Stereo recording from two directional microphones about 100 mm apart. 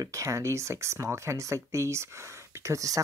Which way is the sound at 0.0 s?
30° right (ahead or behind).